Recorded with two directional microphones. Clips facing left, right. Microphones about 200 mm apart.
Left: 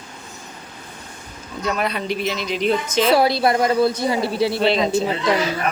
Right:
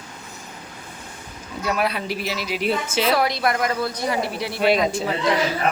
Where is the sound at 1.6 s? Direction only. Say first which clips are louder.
Left 1 dB; 5° right (ahead or behind).